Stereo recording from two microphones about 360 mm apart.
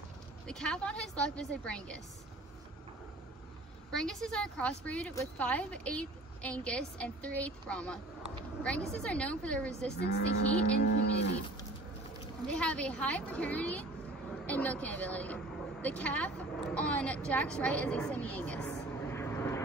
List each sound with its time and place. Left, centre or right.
0.5 s a woman's voice: centre
3.9 s a woman's voice: centre
10.8 s livestock: left
12.4 s a woman's voice: centre